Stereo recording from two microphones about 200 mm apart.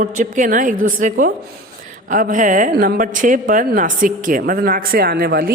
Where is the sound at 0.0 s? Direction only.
40° right (ahead or behind).